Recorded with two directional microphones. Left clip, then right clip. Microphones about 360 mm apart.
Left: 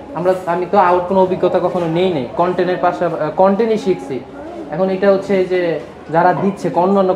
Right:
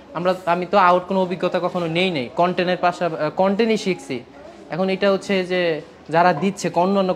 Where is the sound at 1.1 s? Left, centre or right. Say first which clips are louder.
Left 7 dB; right.